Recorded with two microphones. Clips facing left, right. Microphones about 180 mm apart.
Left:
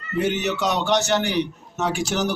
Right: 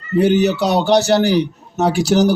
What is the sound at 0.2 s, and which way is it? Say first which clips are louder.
A man's voice: right 9 dB; 35° right (ahead or behind).